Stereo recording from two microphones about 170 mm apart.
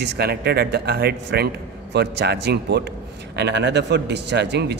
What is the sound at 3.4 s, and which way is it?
A man's voice, 90° right.